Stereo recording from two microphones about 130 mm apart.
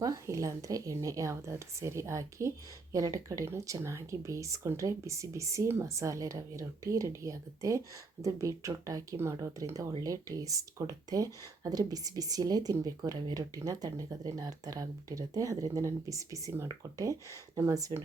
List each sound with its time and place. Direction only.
0.0 s speech: 25° right (ahead or behind)